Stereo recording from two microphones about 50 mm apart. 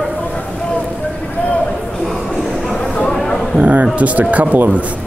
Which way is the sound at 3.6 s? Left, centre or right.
Right.